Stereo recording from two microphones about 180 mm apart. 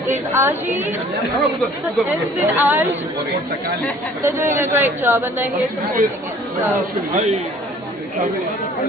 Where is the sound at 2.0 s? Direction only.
10° right (ahead or behind).